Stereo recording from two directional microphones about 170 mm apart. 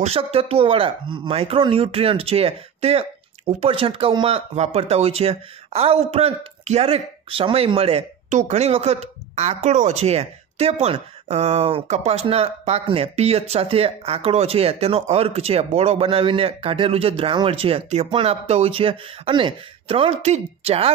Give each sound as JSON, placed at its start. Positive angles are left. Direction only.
{"t": 0.0, "sound": "speech", "side_deg": -35}